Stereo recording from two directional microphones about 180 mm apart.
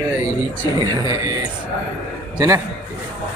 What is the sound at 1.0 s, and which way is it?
Speech, 20° right (ahead or behind).